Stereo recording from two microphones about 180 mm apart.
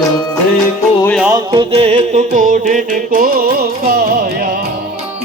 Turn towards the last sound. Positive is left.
turn(degrees=-45)  # may be behind; listen again after turning